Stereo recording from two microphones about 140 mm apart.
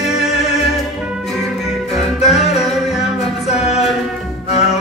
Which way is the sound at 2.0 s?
50° left (ahead or behind).